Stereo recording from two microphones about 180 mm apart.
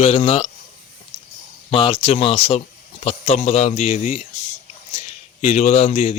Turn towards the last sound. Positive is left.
turn(degrees=35)  # may be behind; listen again after turning